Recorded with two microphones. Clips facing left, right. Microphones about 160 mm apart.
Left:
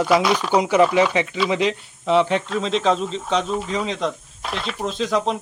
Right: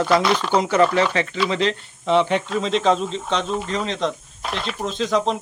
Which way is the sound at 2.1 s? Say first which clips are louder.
Even; centre (ahead or behind).